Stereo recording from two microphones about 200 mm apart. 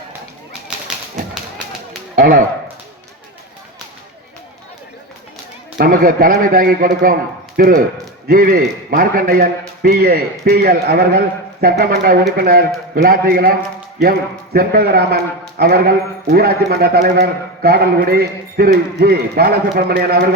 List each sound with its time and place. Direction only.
1.3 s tap: centre (ahead or behind)
2.1 s speech: 45° right (ahead or behind)
5.7 s a man's voice: 45° right (ahead or behind)